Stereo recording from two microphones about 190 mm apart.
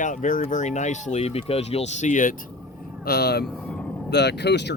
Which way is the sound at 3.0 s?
55° left (ahead or behind).